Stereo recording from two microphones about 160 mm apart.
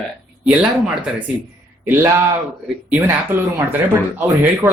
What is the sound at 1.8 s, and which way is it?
Speech, 15° right (ahead or behind).